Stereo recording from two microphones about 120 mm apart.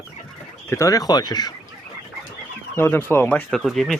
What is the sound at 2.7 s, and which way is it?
Speech, 20° left (ahead or behind).